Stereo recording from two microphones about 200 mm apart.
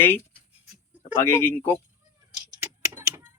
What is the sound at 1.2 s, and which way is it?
Speech, 10° left (ahead or behind).